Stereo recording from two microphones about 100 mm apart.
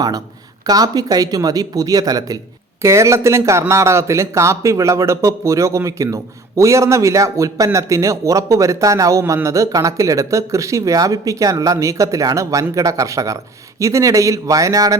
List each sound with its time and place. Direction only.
0.7 s a man's voice: 40° right (ahead or behind)